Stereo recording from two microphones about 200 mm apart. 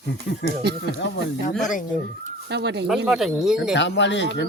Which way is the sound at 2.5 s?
55° right (ahead or behind).